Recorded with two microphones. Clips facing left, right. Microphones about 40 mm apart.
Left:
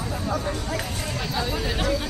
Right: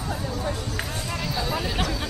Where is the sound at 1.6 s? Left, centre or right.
Centre.